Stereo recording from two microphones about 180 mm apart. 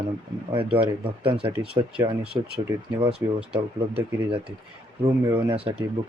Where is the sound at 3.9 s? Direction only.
30° right (ahead or behind).